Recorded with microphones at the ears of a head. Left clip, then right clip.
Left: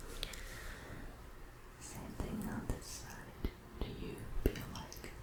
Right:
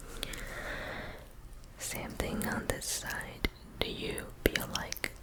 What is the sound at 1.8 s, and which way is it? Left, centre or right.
Whispering, right.